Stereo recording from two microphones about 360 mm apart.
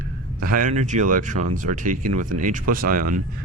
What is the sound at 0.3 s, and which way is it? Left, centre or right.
Speech, right.